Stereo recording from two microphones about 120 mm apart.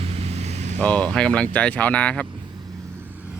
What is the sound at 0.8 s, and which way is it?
Speech, 10° left (ahead or behind).